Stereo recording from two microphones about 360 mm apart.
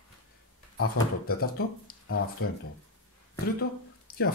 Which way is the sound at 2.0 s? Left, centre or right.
Left.